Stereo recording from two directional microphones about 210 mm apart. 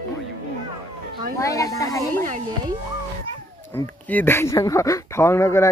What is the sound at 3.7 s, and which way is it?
Speech, 10° left (ahead or behind).